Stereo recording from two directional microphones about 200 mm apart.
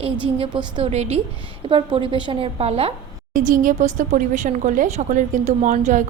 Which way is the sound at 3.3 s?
40° right (ahead or behind).